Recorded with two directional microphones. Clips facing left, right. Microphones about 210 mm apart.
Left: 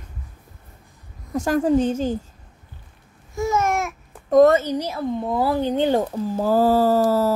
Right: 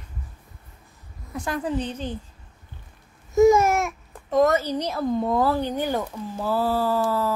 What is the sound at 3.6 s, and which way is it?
Speech, centre (ahead or behind).